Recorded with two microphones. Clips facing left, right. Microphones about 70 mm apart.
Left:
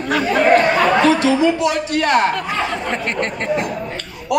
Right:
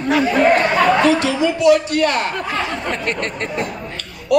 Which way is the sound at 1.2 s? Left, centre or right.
Left.